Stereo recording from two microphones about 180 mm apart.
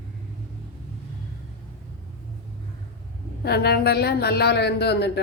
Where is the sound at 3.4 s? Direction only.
65° left (ahead or behind).